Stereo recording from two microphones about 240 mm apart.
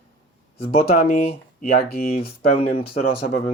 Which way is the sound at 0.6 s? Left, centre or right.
Left.